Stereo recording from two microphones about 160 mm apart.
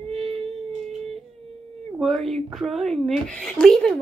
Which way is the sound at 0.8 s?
5° left (ahead or behind).